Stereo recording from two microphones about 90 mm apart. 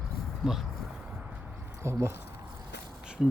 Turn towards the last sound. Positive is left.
turn(degrees=-10)  # may be behind; listen again after turning